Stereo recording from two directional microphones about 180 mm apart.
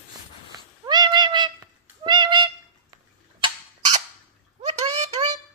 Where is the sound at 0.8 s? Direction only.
25° right (ahead or behind).